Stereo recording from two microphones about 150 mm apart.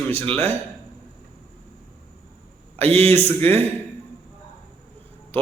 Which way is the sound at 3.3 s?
15° left (ahead or behind).